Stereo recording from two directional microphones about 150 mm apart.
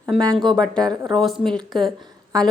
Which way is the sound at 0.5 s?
5° left (ahead or behind).